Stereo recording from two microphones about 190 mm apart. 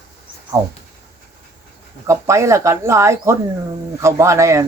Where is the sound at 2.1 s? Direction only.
15° right (ahead or behind).